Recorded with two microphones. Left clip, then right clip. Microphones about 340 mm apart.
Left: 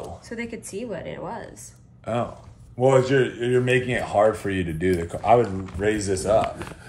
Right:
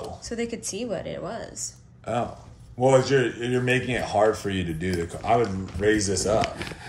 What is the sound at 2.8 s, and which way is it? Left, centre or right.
Speech, left.